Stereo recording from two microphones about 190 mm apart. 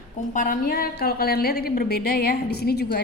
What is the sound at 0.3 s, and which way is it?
A woman's voice, 45° left (ahead or behind).